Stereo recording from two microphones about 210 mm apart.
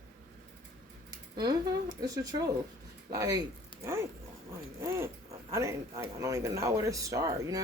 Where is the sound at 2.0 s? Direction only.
15° right (ahead or behind).